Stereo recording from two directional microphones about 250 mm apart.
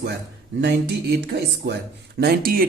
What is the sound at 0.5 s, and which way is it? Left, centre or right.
Speech, right.